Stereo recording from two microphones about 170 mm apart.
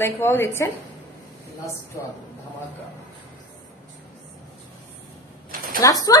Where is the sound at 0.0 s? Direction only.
15° left (ahead or behind).